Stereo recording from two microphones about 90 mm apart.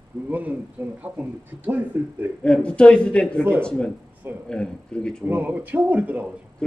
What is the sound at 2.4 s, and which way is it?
Speech, 10° left (ahead or behind).